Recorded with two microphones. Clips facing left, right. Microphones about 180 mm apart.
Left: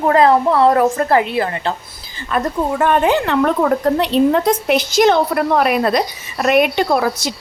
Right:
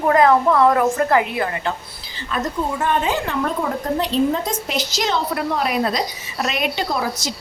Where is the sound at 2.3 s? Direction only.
60° left (ahead or behind).